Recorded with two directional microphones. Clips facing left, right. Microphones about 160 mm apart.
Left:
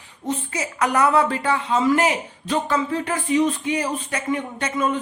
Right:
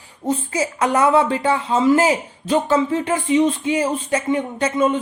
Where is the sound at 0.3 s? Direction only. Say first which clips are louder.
Right 5 dB; 30° right (ahead or behind).